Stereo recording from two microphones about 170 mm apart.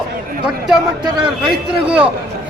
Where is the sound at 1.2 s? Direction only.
5° right (ahead or behind).